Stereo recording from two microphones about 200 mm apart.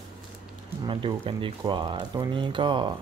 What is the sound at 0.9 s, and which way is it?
Speech, 25° right (ahead or behind).